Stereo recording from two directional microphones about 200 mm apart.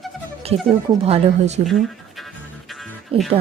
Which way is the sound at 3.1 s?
25° right (ahead or behind).